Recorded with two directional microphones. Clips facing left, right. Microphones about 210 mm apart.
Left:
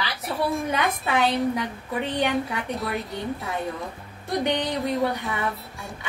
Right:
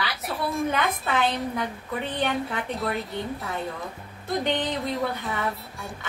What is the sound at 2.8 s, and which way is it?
Speech, centre (ahead or behind).